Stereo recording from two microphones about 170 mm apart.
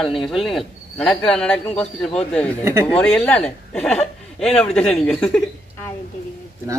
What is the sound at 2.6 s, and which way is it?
Speech, 15° right (ahead or behind).